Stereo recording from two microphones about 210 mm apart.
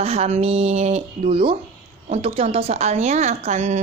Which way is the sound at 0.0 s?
30° right (ahead or behind).